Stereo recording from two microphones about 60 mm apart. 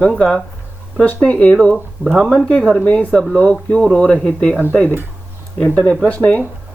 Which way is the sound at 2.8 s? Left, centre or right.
Left.